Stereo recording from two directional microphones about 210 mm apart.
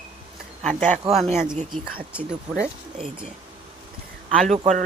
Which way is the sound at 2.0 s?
5° right (ahead or behind).